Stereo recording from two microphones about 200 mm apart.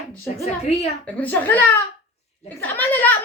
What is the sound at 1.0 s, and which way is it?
A woman's voice, 10° left (ahead or behind).